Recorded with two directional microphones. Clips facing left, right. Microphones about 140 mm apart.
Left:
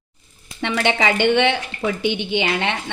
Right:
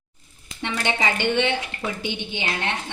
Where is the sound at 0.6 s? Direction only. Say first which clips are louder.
Left 5 dB; 85° left.